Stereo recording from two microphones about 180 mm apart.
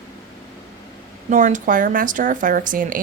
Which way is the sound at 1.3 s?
45° right (ahead or behind).